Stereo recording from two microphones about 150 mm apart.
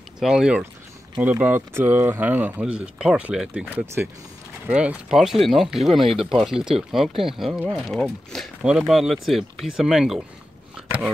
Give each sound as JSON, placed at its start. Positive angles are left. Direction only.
{"t": 0.2, "sound": "speech", "side_deg": -5}
{"t": 6.0, "sound": "speech", "side_deg": -40}
{"t": 6.4, "sound": "speech", "side_deg": -5}